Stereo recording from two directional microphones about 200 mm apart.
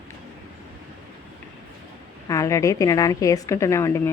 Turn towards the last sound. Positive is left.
turn(degrees=15)  # may be behind; listen again after turning